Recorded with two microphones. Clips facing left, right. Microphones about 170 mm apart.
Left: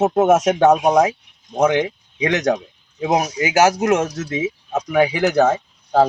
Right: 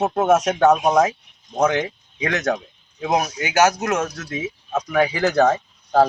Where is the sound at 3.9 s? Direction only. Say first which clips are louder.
Left 5 dB; 25° left (ahead or behind).